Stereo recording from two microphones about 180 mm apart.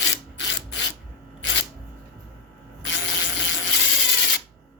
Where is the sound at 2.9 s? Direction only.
85° left.